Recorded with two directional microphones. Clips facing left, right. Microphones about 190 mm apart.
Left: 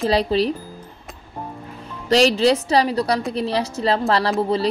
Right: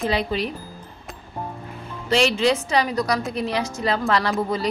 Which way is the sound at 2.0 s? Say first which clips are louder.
Left 4 dB; 35° left (ahead or behind).